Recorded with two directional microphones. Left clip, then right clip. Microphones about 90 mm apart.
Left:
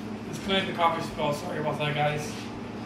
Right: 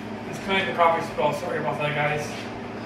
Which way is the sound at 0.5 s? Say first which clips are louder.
Right 5 dB; 25° left (ahead or behind).